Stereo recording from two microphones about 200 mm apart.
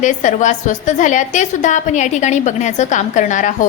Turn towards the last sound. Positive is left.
turn(degrees=40)  # may be behind; listen again after turning